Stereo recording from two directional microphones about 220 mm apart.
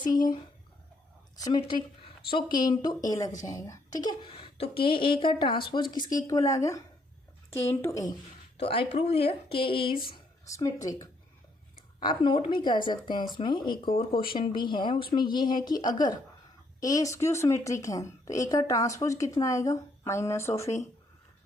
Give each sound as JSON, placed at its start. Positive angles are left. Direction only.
{"t": 0.1, "sound": "a woman's voice", "side_deg": 20}
{"t": 1.5, "sound": "a woman's voice", "side_deg": 20}
{"t": 8.6, "sound": "a woman's voice", "side_deg": 25}